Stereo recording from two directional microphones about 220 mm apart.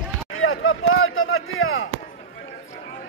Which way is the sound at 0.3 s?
65° left (ahead or behind).